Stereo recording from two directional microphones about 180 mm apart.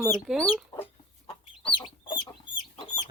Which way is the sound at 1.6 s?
25° left (ahead or behind).